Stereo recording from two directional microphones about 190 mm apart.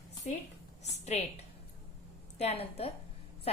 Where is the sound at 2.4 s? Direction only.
30° left (ahead or behind).